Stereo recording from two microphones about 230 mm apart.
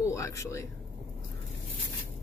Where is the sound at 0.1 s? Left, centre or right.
Centre.